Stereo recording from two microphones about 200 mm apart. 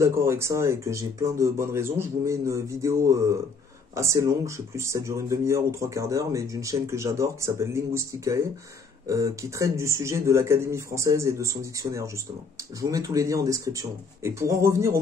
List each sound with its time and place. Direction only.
0.0 s speech: 15° right (ahead or behind)